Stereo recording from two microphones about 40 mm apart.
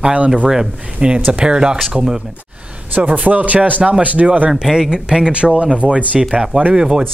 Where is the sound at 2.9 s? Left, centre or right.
Right.